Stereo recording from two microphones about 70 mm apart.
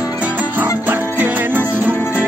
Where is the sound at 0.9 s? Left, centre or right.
Right.